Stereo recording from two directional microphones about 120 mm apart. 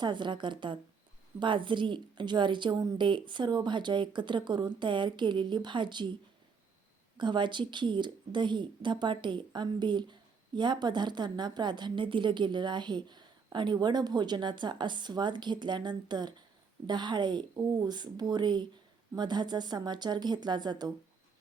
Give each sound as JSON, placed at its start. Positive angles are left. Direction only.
{"t": 0.0, "sound": "a woman's voice", "side_deg": -40}
{"t": 7.2, "sound": "a woman's voice", "side_deg": -40}